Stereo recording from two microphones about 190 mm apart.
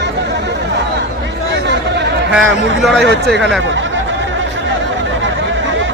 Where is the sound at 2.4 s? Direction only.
80° right.